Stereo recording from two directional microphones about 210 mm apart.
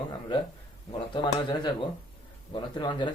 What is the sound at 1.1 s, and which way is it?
A man's voice, 20° left (ahead or behind).